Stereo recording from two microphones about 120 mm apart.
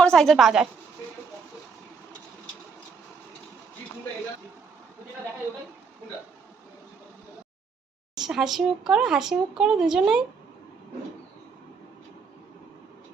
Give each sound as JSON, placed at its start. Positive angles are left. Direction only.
{"t": 0.0, "sound": "speech", "side_deg": 5}
{"t": 8.2, "sound": "speech", "side_deg": 0}